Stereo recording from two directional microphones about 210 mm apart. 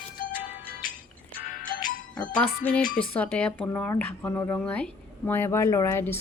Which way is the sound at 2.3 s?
5° left (ahead or behind).